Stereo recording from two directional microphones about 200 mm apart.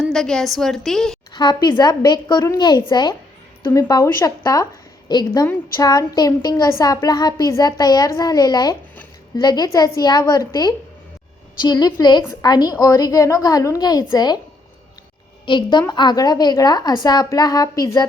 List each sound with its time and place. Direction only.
0.0 s a woman's voice: 5° left (ahead or behind)
1.3 s a woman's voice: 20° left (ahead or behind)
15.4 s a woman's voice: 25° left (ahead or behind)